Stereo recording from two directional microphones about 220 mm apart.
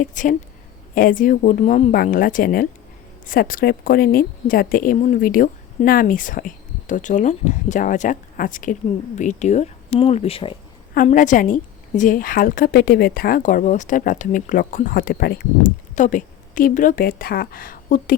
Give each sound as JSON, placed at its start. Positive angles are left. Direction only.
{"t": 0.0, "sound": "a woman's voice", "side_deg": 35}
{"t": 10.9, "sound": "a woman's voice", "side_deg": 35}